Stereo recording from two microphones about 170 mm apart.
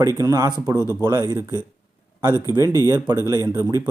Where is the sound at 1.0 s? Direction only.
20° right (ahead or behind).